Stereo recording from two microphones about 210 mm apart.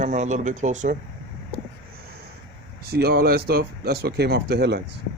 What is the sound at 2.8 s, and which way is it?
Speech, 50° right (ahead or behind).